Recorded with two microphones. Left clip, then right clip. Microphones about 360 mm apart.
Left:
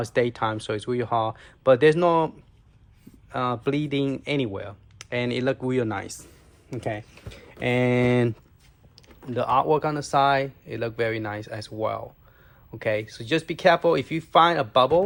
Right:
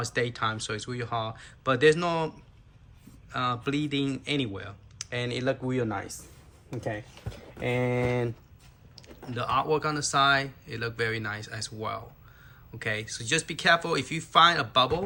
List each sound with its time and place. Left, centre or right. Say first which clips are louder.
0.0 s speech: left 5 dB; centre